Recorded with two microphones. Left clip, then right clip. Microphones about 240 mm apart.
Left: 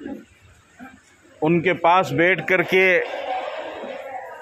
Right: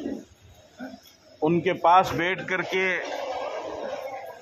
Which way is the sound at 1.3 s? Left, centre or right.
Left.